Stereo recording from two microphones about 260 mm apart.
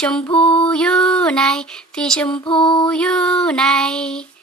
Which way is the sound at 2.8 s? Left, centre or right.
Centre.